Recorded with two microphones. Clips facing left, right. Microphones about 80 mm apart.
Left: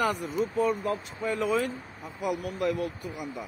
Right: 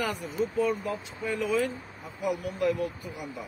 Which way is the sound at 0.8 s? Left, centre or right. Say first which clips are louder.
Left 3 dB; left.